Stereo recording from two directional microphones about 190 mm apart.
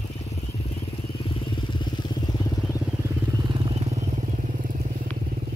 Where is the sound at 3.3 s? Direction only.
25° right (ahead or behind); by 5.0 s 45° right (ahead or behind).